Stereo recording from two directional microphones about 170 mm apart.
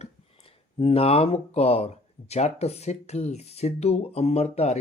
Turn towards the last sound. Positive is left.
turn(degrees=40)  # may be behind; listen again after turning